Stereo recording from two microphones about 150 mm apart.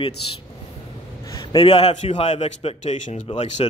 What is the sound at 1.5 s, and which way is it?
A man's voice, 40° left (ahead or behind).